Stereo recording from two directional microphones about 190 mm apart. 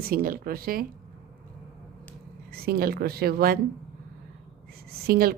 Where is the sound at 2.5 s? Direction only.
55° right (ahead or behind).